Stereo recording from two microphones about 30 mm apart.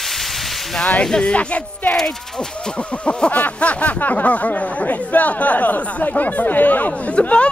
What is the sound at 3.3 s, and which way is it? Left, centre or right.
Speech, left.